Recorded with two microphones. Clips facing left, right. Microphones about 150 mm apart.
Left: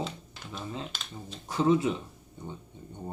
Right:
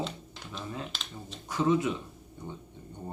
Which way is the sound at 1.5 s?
30° left (ahead or behind).